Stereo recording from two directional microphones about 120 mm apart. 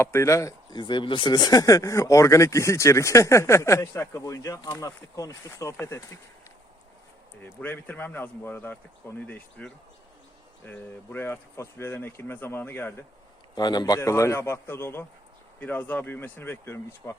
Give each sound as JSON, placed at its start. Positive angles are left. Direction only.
{"t": 0.0, "sound": "speech", "side_deg": 20}
{"t": 0.8, "sound": "speech", "side_deg": 40}
{"t": 7.4, "sound": "speech", "side_deg": 15}
{"t": 13.6, "sound": "speech", "side_deg": 35}